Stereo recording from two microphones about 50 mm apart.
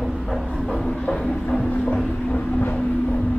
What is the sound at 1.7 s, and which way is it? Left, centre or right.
Vehicle, left.